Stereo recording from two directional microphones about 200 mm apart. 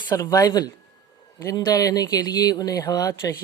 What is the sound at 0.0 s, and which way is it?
Speech, 20° left (ahead or behind).